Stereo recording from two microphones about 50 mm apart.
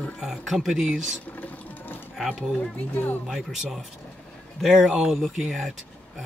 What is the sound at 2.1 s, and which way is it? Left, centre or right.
Speech, centre.